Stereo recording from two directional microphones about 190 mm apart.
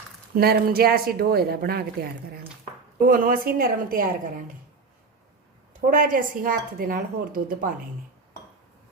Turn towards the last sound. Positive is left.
turn(degrees=-50)  # may be behind; listen again after turning